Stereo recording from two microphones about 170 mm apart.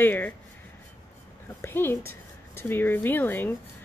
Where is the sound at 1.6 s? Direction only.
15° left (ahead or behind).